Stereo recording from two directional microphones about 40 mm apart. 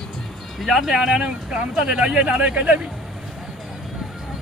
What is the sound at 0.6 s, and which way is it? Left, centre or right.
Speech, centre.